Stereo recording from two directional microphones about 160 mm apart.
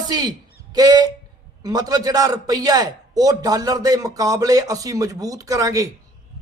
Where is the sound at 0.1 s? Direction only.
25° right (ahead or behind).